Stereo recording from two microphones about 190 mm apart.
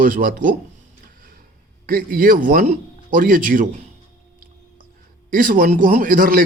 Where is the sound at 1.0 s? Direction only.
45° right (ahead or behind).